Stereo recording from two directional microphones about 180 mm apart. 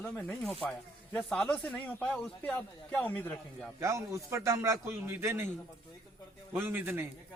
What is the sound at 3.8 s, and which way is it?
A man's voice, 15° right (ahead or behind).